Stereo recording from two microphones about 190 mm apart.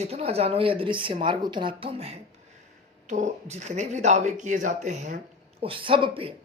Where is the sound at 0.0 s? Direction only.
30° right (ahead or behind).